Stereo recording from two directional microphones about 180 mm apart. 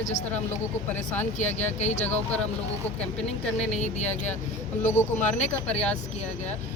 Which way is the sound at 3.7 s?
40° left (ahead or behind).